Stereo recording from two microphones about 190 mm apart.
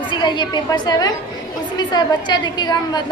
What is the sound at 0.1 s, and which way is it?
A woman's voice, 25° left (ahead or behind).